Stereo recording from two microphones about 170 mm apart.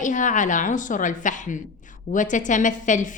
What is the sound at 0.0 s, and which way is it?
A woman's voice, 45° left (ahead or behind).